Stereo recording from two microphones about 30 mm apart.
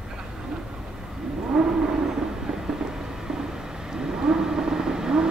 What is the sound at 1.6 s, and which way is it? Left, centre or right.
Vehicle, centre.